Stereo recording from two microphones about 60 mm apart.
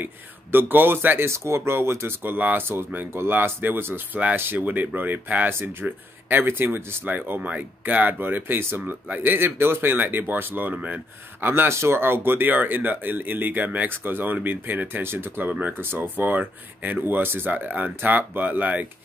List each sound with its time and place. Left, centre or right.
0.0 s speech: right
2.3 s speech: right
11.4 s speech: right